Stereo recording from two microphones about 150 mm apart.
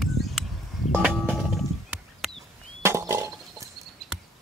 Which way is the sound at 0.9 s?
Centre (ahead or behind).